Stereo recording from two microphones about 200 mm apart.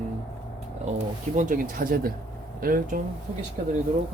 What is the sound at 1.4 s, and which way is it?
Speech, 40° right (ahead or behind).